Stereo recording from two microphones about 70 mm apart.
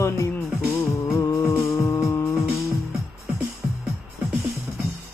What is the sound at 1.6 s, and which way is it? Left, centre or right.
Hum, left.